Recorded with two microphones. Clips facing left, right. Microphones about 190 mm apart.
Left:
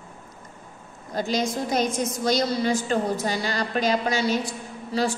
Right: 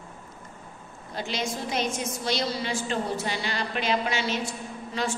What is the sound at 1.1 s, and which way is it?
A woman's voice, 40° left (ahead or behind).